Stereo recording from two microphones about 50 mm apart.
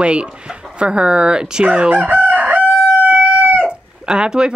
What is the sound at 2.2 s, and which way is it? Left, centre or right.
Crowing, right.